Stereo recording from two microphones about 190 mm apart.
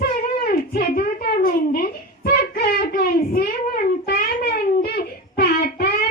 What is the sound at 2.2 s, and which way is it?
Child singing, 55° left (ahead or behind).